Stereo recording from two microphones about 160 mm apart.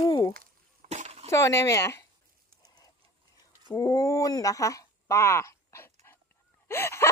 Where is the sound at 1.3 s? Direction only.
15° left (ahead or behind).